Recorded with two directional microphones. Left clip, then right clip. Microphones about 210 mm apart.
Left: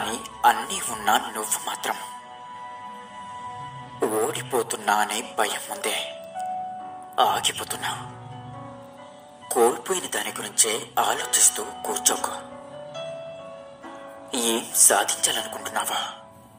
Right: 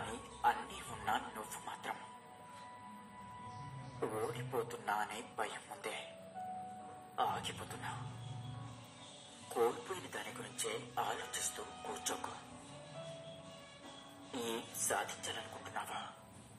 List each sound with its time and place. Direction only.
0.0 s speech: 40° left (ahead or behind)
4.0 s speech: 40° left (ahead or behind)
7.2 s speech: 35° left (ahead or behind)
9.5 s speech: 40° left (ahead or behind)
14.3 s speech: 35° left (ahead or behind)